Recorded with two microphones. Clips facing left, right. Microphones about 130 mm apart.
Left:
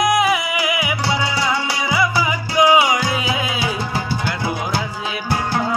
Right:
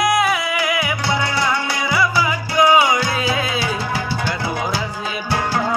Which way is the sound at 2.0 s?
15° left (ahead or behind).